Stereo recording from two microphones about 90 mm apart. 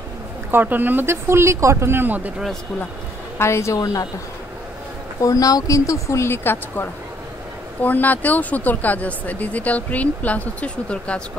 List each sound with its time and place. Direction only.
0.5 s speech: 20° right (ahead or behind)
3.3 s speech: 30° left (ahead or behind)
5.2 s speech: 40° left (ahead or behind); by 11.2 s 10° left (ahead or behind)